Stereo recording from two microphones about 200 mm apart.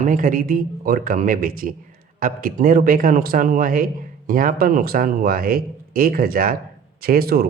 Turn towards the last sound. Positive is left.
turn(degrees=-50)  # may be behind; listen again after turning